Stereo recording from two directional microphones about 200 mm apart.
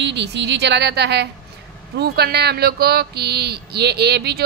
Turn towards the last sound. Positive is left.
turn(degrees=-55)  # may be behind; listen again after turning